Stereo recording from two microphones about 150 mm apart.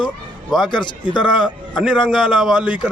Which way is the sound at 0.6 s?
30° left (ahead or behind).